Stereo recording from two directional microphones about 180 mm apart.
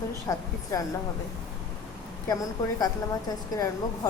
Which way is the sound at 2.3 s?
20° left (ahead or behind).